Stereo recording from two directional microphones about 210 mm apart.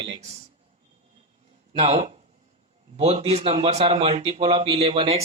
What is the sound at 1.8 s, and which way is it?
A man's voice, 30° right (ahead or behind).